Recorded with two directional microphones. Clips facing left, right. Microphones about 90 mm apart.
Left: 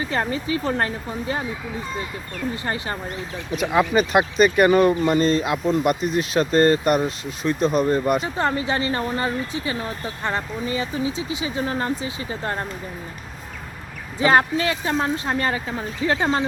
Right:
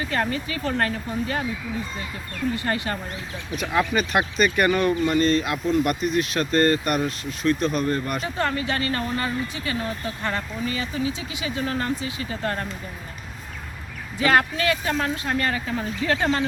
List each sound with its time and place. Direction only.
0.1 s speech: 25° left (ahead or behind)
2.6 s speech: 25° left (ahead or behind)
14.2 s speech: 25° left (ahead or behind)